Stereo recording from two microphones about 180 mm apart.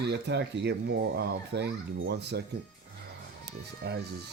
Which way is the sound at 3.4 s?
70° right (ahead or behind).